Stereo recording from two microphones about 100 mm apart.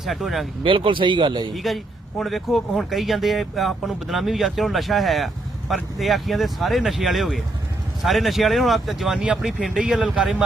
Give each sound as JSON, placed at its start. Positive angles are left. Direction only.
{"t": 0.0, "sound": "speech", "side_deg": 0}
{"t": 0.6, "sound": "speech", "side_deg": -60}
{"t": 1.5, "sound": "speech", "side_deg": 0}